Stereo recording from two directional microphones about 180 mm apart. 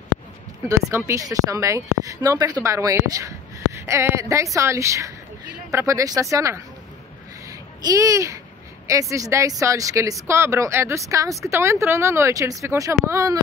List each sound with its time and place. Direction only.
0.7 s speech: 15° right (ahead or behind)
7.8 s speech: 20° right (ahead or behind)